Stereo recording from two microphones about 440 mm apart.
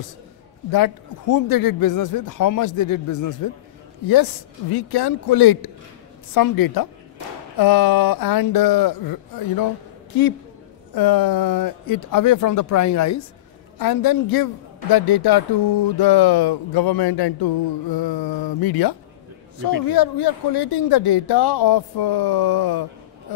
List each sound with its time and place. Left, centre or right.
0.7 s speech: left
4.1 s speech: left
13.7 s speech: left